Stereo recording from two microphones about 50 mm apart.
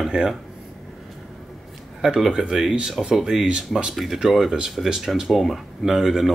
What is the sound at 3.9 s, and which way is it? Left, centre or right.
Speech, centre.